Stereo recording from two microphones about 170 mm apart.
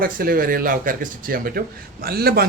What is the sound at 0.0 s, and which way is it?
A man's voice, 60° right (ahead or behind).